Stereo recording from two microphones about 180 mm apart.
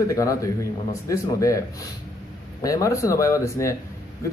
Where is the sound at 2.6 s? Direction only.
15° left (ahead or behind).